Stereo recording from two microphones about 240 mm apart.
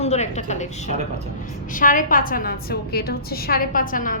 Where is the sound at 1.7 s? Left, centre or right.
Left.